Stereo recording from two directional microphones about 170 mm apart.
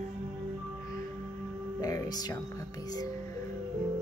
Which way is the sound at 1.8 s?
20° left (ahead or behind).